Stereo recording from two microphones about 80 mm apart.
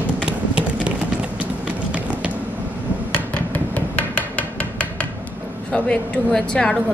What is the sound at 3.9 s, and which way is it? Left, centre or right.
Hammer, centre.